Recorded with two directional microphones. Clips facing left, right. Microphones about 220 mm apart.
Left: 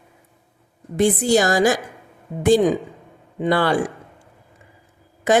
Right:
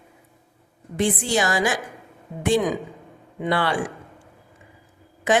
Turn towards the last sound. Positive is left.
turn(degrees=40)  # may be behind; listen again after turning